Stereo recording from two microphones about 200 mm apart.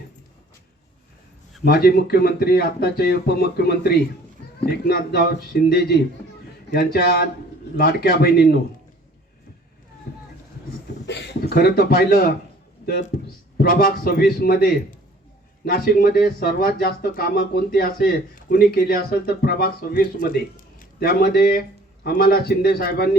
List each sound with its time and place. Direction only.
1.6 s speech: 50° left (ahead or behind)
11.0 s speech: 60° left (ahead or behind)
13.6 s speech: 45° left (ahead or behind)